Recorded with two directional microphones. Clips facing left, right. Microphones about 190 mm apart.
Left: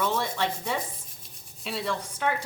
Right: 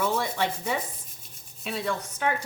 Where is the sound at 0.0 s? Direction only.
10° right (ahead or behind).